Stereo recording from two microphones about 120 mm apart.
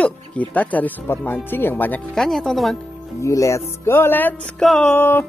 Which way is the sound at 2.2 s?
Centre (ahead or behind).